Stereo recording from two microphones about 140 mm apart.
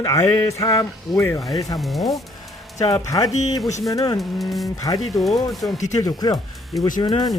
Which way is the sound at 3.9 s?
25° left (ahead or behind).